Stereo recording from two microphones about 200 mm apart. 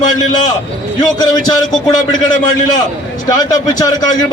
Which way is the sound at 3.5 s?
20° left (ahead or behind).